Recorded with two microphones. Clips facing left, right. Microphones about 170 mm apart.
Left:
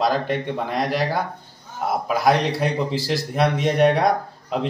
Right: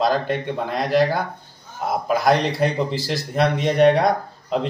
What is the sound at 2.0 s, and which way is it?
A man's voice, 5° left (ahead or behind).